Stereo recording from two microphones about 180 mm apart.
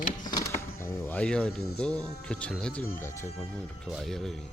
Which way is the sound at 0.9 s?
10° left (ahead or behind).